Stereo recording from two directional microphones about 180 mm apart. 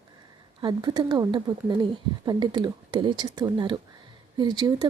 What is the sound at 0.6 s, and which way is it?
Speech, 25° right (ahead or behind).